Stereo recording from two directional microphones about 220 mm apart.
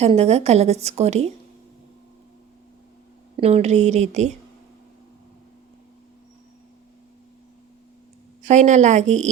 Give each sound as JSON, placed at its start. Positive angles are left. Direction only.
{"t": 0.0, "sound": "a woman's voice", "side_deg": -30}
{"t": 3.3, "sound": "speech", "side_deg": -30}
{"t": 8.4, "sound": "speech", "side_deg": -30}